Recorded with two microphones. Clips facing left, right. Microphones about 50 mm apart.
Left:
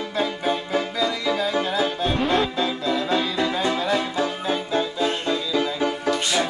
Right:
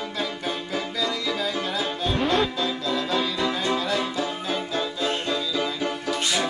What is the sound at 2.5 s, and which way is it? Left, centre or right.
Music, left.